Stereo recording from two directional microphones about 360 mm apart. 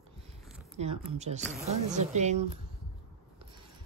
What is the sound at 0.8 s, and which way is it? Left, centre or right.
A woman's voice, centre.